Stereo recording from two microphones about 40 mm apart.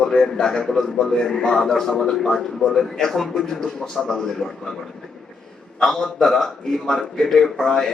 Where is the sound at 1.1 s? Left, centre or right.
Centre.